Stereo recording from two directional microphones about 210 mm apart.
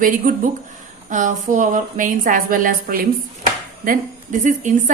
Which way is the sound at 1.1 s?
35° right (ahead or behind).